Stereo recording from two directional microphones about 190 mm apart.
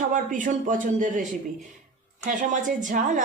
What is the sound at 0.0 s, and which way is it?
Speech, 45° right (ahead or behind).